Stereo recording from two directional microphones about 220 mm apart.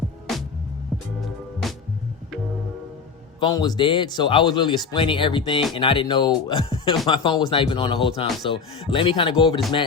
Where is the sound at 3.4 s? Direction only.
20° left (ahead or behind).